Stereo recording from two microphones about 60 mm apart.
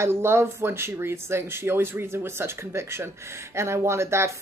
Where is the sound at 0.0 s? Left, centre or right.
Right.